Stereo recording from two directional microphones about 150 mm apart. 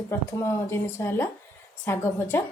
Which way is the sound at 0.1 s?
20° left (ahead or behind).